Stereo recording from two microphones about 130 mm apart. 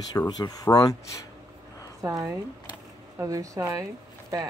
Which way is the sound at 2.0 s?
25° right (ahead or behind).